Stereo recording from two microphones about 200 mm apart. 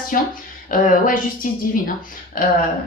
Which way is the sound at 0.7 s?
45° left (ahead or behind).